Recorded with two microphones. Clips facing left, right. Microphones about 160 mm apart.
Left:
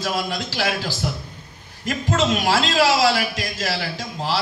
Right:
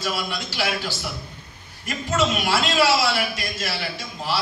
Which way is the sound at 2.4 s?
90° left.